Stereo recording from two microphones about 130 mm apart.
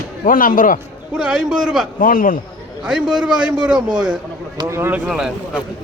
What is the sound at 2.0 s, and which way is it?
Speech, 90° left.